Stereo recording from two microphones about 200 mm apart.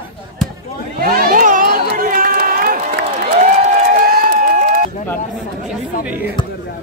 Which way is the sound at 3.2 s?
35° right (ahead or behind).